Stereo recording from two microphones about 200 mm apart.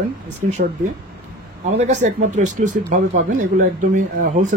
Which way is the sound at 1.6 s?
35° right (ahead or behind).